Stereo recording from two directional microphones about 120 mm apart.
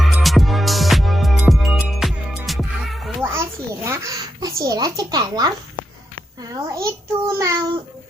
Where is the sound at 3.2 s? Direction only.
20° right (ahead or behind).